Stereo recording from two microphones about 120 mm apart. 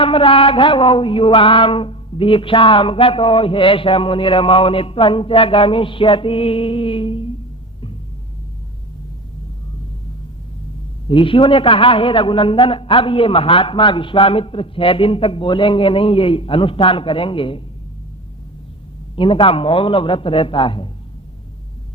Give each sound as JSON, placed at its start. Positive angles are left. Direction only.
{"t": 0.0, "sound": "music", "side_deg": 50}
{"t": 11.1, "sound": "music", "side_deg": 50}
{"t": 19.1, "sound": "music", "side_deg": 45}